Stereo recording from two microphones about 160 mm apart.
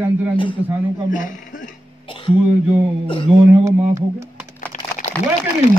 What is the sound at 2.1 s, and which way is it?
Throat clearing, 30° left (ahead or behind).